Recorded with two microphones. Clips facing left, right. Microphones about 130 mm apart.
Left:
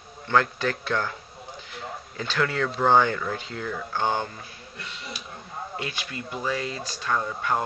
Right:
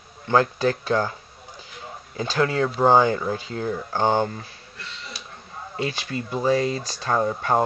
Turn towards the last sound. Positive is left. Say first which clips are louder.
# right 5 dB
turn(degrees=-35)  # may be behind; listen again after turning